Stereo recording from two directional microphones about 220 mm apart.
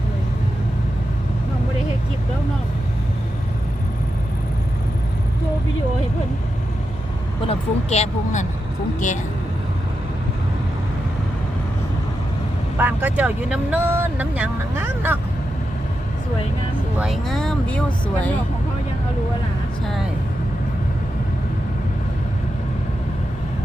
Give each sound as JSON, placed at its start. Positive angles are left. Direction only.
{"t": 7.4, "sound": "speech", "side_deg": 30}
{"t": 12.7, "sound": "speech", "side_deg": -10}
{"t": 17.0, "sound": "speech", "side_deg": 0}